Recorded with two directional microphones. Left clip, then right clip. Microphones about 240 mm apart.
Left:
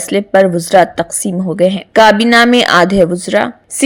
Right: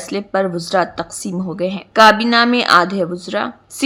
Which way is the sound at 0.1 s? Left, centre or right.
Centre.